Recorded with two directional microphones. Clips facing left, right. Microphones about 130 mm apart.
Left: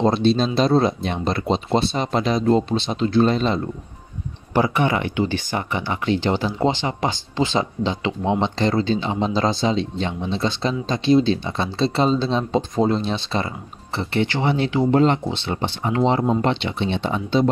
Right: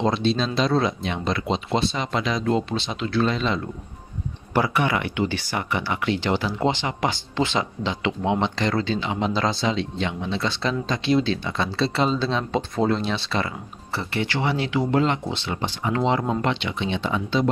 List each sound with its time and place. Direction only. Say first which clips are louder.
0.0 s speech: left 4 dB; 40° left (ahead or behind)
4.6 s speech: left 3 dB; 25° left (ahead or behind)